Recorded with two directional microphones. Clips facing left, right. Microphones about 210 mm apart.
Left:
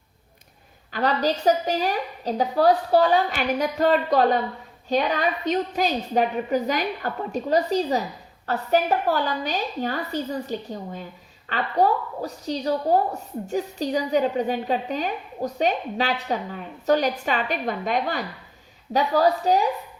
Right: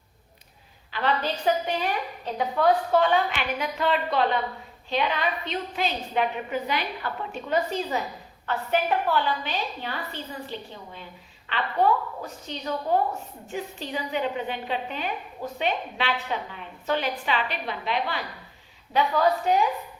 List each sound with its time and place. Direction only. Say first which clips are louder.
0.9 s a woman's voice: left 4 dB; 40° left (ahead or behind)